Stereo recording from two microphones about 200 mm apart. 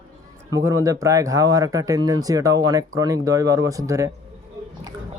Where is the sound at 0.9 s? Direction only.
15° right (ahead or behind).